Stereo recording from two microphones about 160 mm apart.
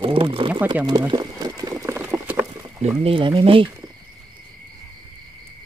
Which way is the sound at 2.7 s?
35° right (ahead or behind).